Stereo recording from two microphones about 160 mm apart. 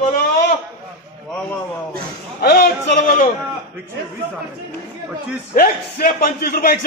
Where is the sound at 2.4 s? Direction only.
90° left.